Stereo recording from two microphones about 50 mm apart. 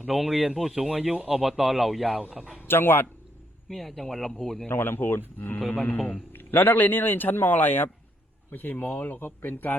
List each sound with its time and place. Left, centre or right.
0.2 s speech: centre
2.2 s speech: centre
2.6 s a man's voice: left
3.7 s speech: centre
4.7 s a man's voice: left
5.5 s speech: left
6.3 s a man's voice: left